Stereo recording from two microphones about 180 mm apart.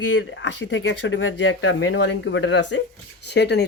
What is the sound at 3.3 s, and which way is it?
Speech, 70° left (ahead or behind).